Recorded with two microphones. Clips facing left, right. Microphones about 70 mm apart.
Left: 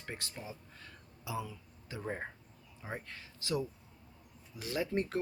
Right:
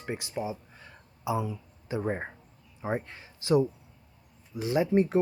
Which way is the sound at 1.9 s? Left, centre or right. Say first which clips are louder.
Right 9 dB; right.